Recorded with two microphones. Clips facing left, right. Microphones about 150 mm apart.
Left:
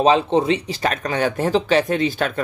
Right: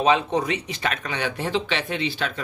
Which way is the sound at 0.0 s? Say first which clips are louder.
Left 5 dB; 30° left (ahead or behind).